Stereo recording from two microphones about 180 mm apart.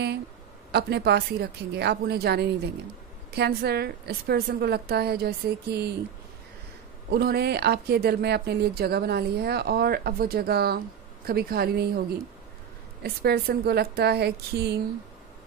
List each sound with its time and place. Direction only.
0.7 s speech: 65° right (ahead or behind)
7.1 s speech: 60° right (ahead or behind)
13.0 s speech: 60° right (ahead or behind)